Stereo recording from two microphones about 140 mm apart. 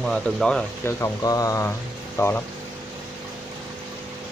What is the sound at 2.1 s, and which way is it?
Speech, 15° left (ahead or behind).